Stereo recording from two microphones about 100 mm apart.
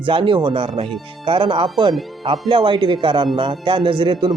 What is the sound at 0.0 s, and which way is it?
Speech, 60° right (ahead or behind).